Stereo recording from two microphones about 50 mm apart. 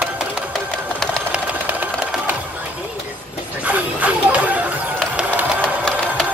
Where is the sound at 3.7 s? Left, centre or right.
Right.